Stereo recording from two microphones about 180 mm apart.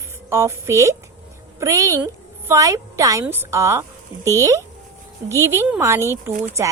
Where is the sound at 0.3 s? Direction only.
15° right (ahead or behind).